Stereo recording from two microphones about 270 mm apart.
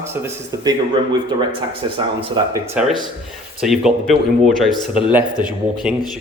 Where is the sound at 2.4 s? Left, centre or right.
Centre.